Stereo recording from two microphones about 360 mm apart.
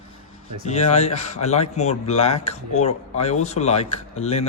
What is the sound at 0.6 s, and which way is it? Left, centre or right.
Speech, centre.